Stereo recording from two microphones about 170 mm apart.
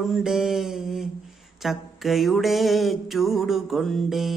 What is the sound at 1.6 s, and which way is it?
Speech, centre (ahead or behind).